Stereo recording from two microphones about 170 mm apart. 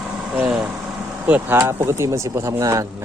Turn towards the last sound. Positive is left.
turn(degrees=-20)  # may be behind; listen again after turning